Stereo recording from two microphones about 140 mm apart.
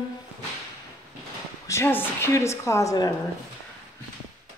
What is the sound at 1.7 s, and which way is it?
A woman's voice, 15° left (ahead or behind).